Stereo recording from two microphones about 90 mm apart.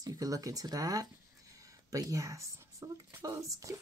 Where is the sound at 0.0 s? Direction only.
40° right (ahead or behind).